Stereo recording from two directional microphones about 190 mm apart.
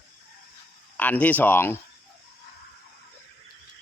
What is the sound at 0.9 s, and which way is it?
Speech, 10° left (ahead or behind).